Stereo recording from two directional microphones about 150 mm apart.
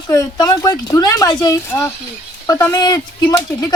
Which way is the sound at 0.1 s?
25° left (ahead or behind).